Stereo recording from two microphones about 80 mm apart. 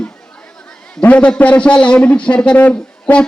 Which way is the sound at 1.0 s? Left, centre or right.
Centre.